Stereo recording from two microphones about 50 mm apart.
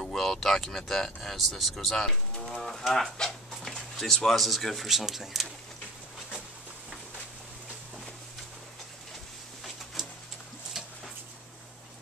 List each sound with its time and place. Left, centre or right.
0.0 s speech: centre
10.0 s pigeon: centre